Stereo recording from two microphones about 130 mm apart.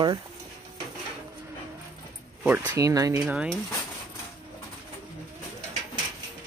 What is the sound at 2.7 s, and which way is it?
Speech, 25° right (ahead or behind).